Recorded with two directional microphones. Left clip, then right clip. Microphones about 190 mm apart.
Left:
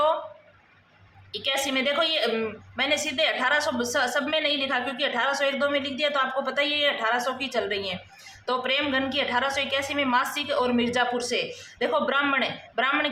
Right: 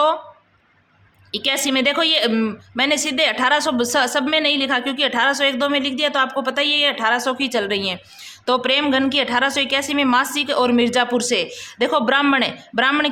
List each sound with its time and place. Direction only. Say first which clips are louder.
1.3 s a woman's voice: right 6 dB; 55° right (ahead or behind)